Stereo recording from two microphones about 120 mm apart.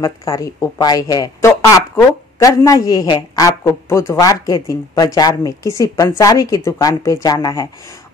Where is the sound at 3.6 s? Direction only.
25° left (ahead or behind).